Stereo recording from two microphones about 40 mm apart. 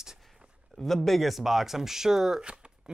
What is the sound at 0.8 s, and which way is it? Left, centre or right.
Speech, centre.